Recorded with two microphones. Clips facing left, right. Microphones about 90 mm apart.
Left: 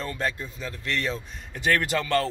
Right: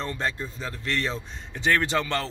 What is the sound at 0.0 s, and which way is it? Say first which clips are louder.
Speech: even; 25° right (ahead or behind).